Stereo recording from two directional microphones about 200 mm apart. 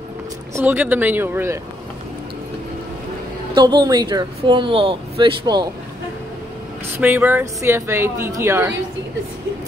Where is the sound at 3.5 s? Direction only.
20° right (ahead or behind).